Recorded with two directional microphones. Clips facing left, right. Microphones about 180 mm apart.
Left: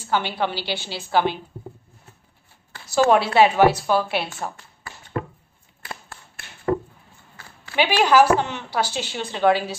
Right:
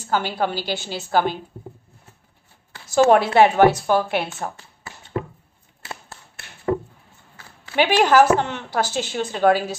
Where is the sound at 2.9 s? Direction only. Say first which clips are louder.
Right 2 dB; 50° right (ahead or behind).